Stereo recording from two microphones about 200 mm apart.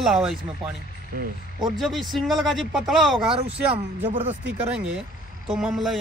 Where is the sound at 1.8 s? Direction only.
Centre (ahead or behind).